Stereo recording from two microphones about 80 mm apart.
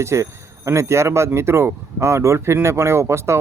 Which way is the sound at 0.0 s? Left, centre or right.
Right.